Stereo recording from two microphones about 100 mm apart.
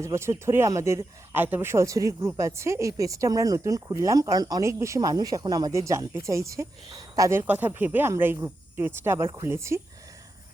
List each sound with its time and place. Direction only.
0.0 s speech: 30° right (ahead or behind)
4.7 s speech: 30° right (ahead or behind)
7.4 s speech: 20° right (ahead or behind)